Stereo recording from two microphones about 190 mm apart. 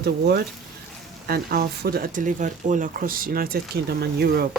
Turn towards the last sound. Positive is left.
turn(degrees=-55)  # may be behind; listen again after turning